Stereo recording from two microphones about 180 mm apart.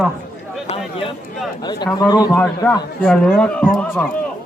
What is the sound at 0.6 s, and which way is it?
A man's voice, 30° left (ahead or behind).